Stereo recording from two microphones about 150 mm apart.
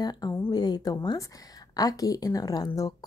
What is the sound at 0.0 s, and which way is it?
Speech, 25° left (ahead or behind).